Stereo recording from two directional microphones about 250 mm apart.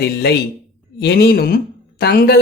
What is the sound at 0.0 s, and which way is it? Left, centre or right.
Speech, left.